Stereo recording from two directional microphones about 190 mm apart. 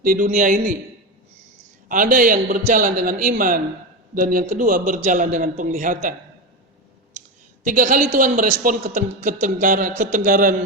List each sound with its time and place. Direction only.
0.0 s a man's voice: 50° right (ahead or behind)
1.9 s a man's voice: 45° right (ahead or behind)
7.6 s a man's voice: 40° right (ahead or behind)